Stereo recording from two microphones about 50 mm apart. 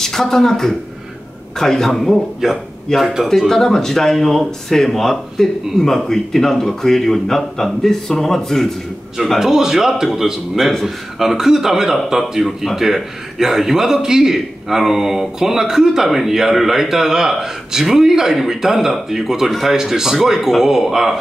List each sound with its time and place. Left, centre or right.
0.0 s speech: centre
2.4 s speech: centre
2.9 s speech: centre
9.4 s speech: centre
11.2 s speech: centre